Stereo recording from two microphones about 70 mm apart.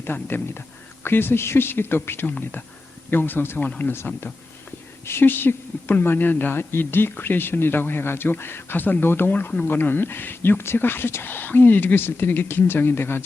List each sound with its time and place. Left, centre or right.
0.0 s speech: left